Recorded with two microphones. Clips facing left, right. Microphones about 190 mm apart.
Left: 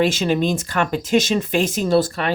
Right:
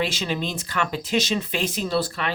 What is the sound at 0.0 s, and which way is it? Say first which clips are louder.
Speech: left 8 dB; 50° left (ahead or behind).